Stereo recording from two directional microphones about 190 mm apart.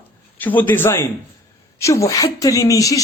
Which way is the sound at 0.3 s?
10° left (ahead or behind).